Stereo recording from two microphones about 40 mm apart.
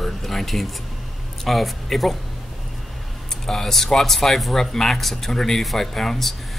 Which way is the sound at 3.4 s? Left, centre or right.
Centre.